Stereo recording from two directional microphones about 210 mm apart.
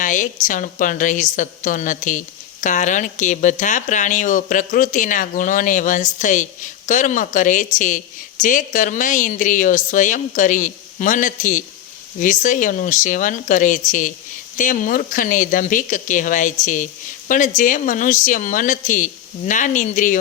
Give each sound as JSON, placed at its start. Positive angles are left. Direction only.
{"t": 0.0, "sound": "a woman's voice", "side_deg": 40}